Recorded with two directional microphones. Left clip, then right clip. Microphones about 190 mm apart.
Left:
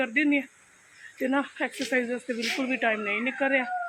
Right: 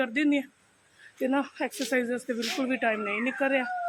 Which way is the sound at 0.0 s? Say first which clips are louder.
Left 2 dB; 20° right (ahead or behind).